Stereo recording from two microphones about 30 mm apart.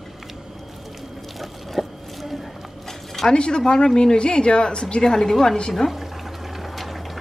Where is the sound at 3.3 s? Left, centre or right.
Left.